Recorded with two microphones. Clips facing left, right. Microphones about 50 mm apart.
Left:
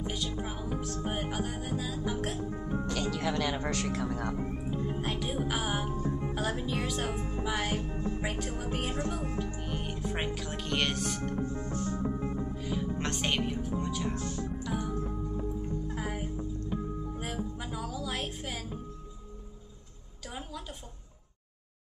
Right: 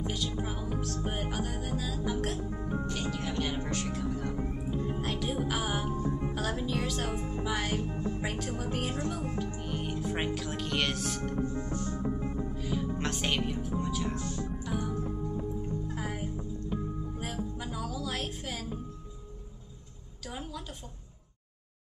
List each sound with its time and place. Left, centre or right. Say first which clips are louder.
0.0 s music: right 1 dB; centre
2.9 s speech: left 3 dB; left
4.6 s music: right 1 dB; centre
8.2 s speech: even; centre
12.3 s music: even; centre
20.2 s music: right 1 dB; centre